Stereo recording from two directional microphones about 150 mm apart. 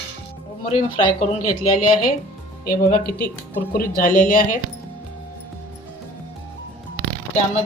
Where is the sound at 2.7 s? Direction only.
80° left; by 4.5 s 65° left (ahead or behind).